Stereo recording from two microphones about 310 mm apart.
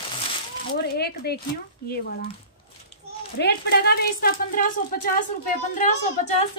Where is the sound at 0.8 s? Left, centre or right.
Left.